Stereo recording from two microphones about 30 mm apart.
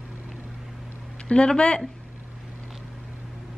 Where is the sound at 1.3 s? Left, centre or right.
Left.